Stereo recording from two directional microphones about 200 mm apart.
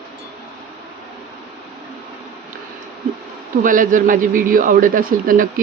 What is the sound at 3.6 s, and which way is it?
Speech, 40° right (ahead or behind).